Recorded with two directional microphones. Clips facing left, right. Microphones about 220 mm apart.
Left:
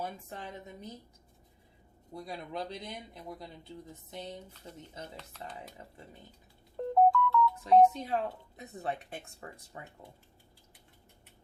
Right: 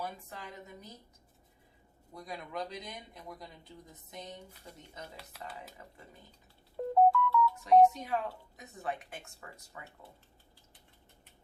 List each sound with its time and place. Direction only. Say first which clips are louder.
0.0 s speech: left 2 dB; 30° left (ahead or behind)
2.2 s speech: left 1 dB; 30° left (ahead or behind)
5.1 s speech: left 1 dB; 10° right (ahead or behind)
6.7 s music: even; 5° right (ahead or behind)
7.6 s speech: even; 35° left (ahead or behind)